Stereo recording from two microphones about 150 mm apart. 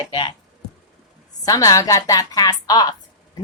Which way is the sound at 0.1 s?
35° left (ahead or behind).